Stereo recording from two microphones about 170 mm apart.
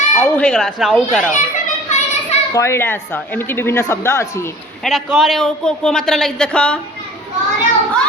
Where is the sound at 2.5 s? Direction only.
15° left (ahead or behind).